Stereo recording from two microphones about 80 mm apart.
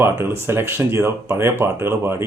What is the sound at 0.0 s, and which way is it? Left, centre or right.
Speech, right.